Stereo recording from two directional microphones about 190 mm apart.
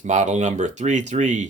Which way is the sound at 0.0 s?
40° right (ahead or behind).